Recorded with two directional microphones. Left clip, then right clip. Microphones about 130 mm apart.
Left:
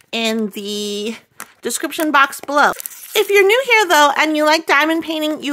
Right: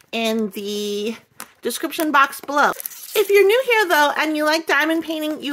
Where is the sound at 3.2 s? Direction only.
50° left (ahead or behind).